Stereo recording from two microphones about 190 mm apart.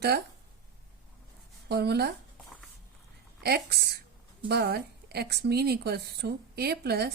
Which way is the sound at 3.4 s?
60° right (ahead or behind).